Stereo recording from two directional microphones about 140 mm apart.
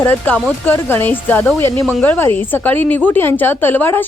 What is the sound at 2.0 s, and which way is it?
A woman's voice, 15° left (ahead or behind).